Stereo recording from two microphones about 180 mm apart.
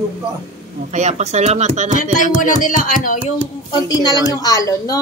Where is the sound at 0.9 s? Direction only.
40° right (ahead or behind).